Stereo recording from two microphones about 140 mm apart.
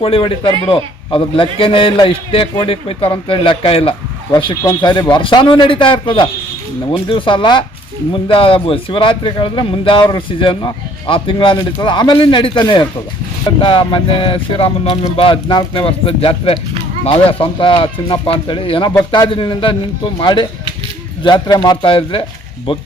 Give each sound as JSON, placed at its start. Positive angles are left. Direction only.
{"t": 0.0, "sound": "a man's voice", "side_deg": 40}